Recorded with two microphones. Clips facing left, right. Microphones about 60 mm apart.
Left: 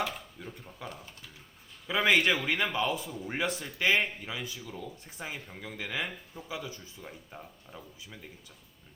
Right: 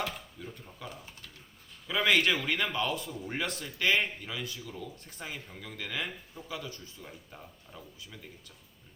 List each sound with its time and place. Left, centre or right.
0.3 s speech: centre
0.9 s speech: centre
1.9 s speech: centre
2.2 s speech: centre
3.1 s speech: centre
3.4 s speech: centre
6.0 s speech: centre
6.5 s speech: centre